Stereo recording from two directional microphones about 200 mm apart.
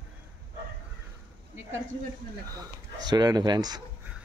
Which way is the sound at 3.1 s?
20° right (ahead or behind).